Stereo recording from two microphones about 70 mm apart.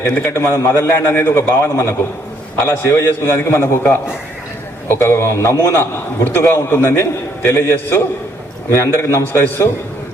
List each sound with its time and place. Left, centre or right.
0.3 s a man's voice: left